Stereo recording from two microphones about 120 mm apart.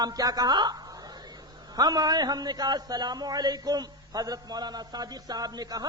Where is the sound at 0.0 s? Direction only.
30° right (ahead or behind).